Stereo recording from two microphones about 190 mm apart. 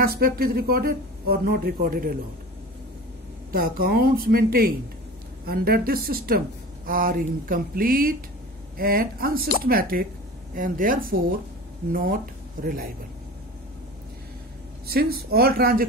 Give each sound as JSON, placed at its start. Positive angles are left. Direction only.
{"t": 0.0, "sound": "speech", "side_deg": -50}
{"t": 3.5, "sound": "speech", "side_deg": -50}
{"t": 14.9, "sound": "speech", "side_deg": -55}